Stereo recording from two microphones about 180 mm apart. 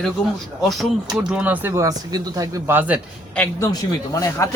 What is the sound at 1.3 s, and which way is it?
Speech, 10° right (ahead or behind).